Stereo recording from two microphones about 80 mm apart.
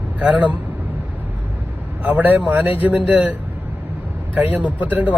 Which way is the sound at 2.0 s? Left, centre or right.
Centre.